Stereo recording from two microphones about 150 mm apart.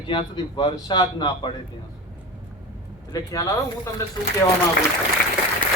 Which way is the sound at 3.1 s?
25° left (ahead or behind).